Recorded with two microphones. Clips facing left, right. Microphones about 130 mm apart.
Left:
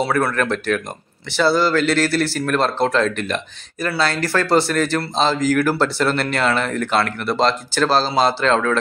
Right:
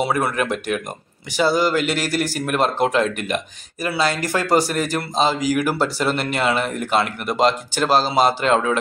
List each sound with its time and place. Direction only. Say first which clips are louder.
0.0 s speech: left 1 dB; 15° right (ahead or behind)